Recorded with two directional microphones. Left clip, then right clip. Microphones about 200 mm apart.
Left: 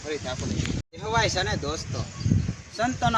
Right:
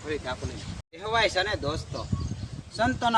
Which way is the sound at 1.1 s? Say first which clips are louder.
Even; 25° right (ahead or behind).